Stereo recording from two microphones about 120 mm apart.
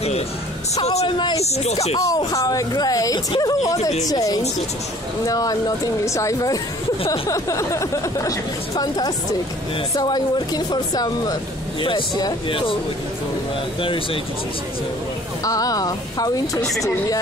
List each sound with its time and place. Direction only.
0.7 s a man's voice: 65° left (ahead or behind)
1.0 s speech: 40° left (ahead or behind)
1.4 s speech: 65° left (ahead or behind)
2.0 s speech: 30° left (ahead or behind); by 12.7 s 45° left (ahead or behind)
13.7 s speech: 50° left (ahead or behind)
15.4 s speech: 30° left (ahead or behind)